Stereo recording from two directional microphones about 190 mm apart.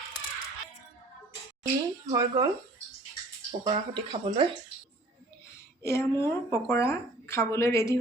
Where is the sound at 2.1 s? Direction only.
20° right (ahead or behind).